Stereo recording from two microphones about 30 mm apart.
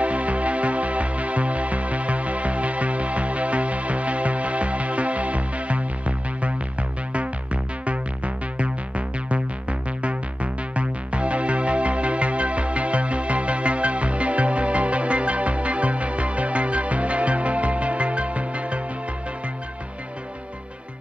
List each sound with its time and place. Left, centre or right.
0.0 s music: right